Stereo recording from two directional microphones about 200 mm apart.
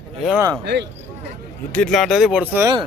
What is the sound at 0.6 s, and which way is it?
Speech, 60° right (ahead or behind).